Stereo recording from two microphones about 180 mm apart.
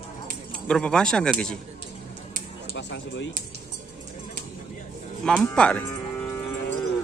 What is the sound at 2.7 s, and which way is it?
Speech, 80° left.